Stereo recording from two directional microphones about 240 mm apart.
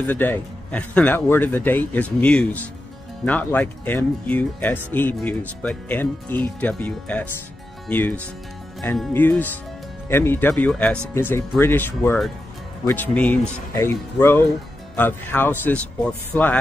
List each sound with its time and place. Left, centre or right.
0.0 s speech: centre
8.8 s speech: centre